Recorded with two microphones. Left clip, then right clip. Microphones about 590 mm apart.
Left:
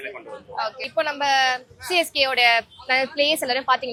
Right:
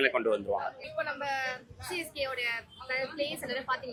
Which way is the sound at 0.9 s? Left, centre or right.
Left.